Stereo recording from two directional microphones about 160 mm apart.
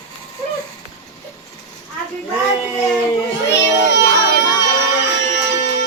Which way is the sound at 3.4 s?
90° left.